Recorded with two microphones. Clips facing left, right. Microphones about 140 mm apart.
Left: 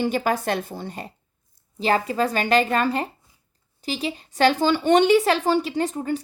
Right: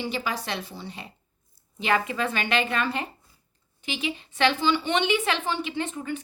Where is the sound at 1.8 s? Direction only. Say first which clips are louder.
Left 4 dB; 35° left (ahead or behind).